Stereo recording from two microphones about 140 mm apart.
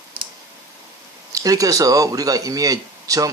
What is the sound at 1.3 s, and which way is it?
Speech, 25° right (ahead or behind).